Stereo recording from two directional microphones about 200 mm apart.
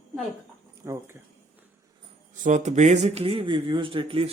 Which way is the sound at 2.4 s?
35° right (ahead or behind).